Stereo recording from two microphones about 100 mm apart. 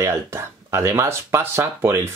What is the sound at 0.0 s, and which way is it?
Speech, 25° right (ahead or behind).